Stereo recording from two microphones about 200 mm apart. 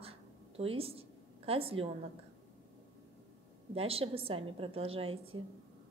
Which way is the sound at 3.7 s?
30° right (ahead or behind).